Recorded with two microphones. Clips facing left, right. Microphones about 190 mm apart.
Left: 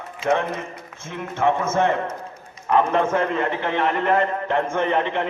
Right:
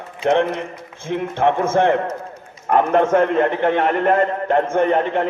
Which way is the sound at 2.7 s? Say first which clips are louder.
Right 4 dB; 45° right (ahead or behind).